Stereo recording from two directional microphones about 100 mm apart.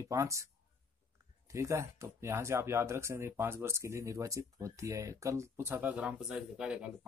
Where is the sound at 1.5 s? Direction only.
30° right (ahead or behind).